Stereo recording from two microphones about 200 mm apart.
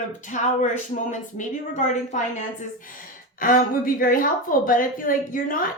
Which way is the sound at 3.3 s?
45° left (ahead or behind).